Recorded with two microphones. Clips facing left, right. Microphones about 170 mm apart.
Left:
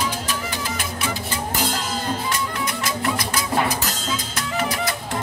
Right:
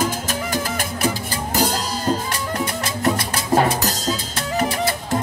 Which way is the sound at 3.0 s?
40° right (ahead or behind).